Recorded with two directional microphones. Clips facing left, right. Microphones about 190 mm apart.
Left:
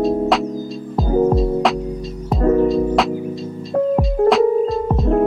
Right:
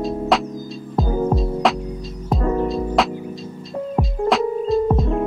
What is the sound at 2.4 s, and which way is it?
Music, 50° left (ahead or behind).